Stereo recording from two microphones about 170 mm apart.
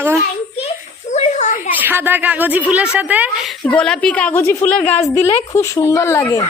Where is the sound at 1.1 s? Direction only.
40° left (ahead or behind).